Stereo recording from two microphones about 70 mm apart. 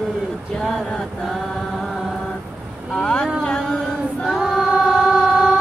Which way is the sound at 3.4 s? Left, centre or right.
Centre.